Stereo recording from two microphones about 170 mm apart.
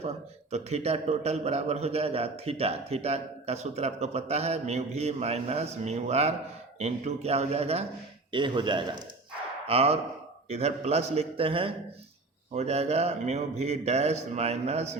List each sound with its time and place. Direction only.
0.5 s a man's voice: 40° right (ahead or behind)